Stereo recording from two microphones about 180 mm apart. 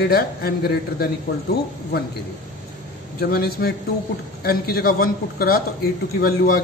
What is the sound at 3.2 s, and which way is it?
A man's voice, 60° left (ahead or behind).